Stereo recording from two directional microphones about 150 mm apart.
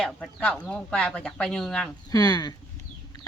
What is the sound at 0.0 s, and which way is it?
Speech, 5° left (ahead or behind).